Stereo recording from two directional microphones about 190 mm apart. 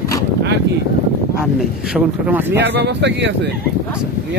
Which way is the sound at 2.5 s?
65° right (ahead or behind).